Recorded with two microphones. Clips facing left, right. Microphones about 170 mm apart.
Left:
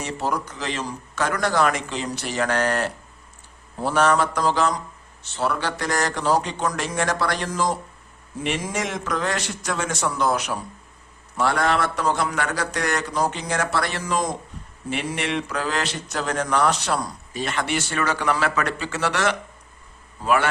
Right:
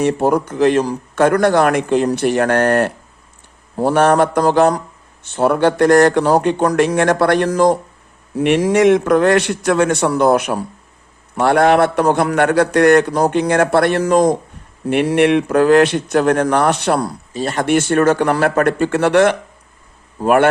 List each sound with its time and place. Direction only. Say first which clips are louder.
0.0 s a man's voice: right 12 dB; 55° right (ahead or behind)
17.3 s a man's voice: right 9 dB; 40° right (ahead or behind); by 20.5 s 55° right (ahead or behind)